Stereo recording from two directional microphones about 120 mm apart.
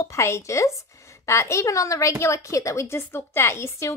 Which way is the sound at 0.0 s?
25° left (ahead or behind).